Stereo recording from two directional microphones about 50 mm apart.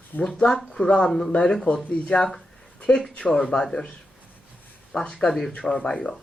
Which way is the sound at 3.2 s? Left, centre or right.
Centre.